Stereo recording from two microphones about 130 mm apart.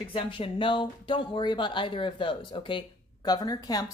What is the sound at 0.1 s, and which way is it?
A woman's voice, 40° left (ahead or behind).